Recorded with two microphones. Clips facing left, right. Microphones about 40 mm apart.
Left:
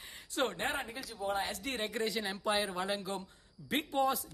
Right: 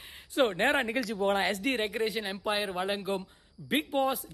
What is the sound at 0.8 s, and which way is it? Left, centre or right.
Speech, right.